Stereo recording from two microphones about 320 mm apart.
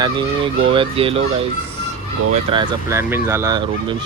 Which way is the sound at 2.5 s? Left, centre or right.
Centre.